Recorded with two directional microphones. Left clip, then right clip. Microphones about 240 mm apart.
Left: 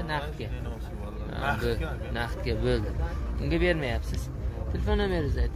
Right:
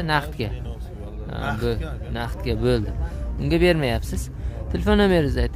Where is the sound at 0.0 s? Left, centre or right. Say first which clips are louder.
Right 9 dB; right.